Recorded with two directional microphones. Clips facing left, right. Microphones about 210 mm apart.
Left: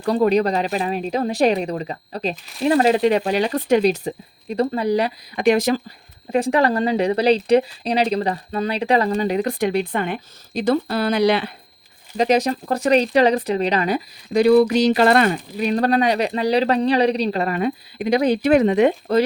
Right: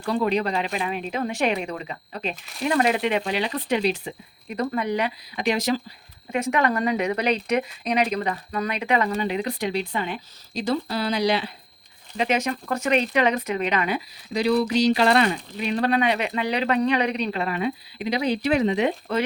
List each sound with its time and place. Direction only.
0.0 s speech: 40° left (ahead or behind)
5.4 s speech: 50° left (ahead or behind)
6.3 s speech: 35° left (ahead or behind); by 11.5 s 55° left (ahead or behind)
12.1 s speech: 40° left (ahead or behind); by 18.9 s 55° left (ahead or behind)